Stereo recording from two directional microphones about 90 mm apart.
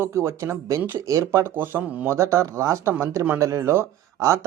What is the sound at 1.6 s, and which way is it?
Speech, 25° right (ahead or behind).